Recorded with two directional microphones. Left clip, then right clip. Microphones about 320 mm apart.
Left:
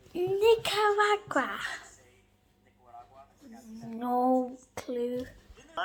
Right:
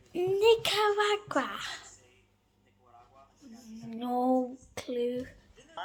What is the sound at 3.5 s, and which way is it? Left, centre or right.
Speech, centre.